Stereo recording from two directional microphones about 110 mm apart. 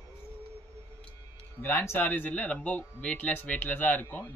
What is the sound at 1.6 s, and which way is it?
Speech, 20° left (ahead or behind).